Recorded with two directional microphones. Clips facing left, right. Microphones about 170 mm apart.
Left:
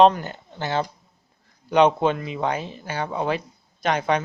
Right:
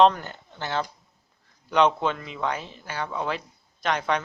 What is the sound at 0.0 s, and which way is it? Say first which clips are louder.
Speech: left 3 dB; 15° left (ahead or behind).